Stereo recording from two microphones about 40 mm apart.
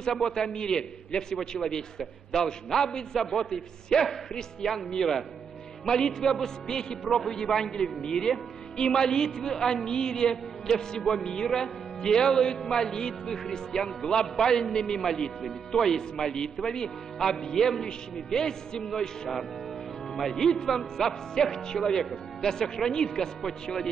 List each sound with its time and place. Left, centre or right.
0.0 s a man's voice: centre
11.2 s music: centre
11.5 s a man's voice: centre
13.7 s music: centre
14.3 s a man's voice: centre
20.1 s a man's voice: centre